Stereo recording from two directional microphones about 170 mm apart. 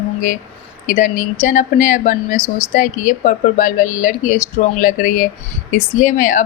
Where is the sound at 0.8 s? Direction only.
50° left (ahead or behind).